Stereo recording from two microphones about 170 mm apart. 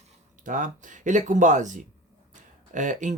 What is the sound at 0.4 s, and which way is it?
Speech, 50° right (ahead or behind).